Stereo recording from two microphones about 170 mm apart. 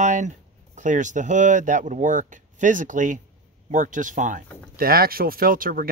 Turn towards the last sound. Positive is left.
turn(degrees=-55)  # may be behind; listen again after turning